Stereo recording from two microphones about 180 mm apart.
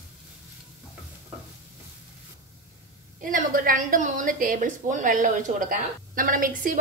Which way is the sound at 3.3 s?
50° right (ahead or behind).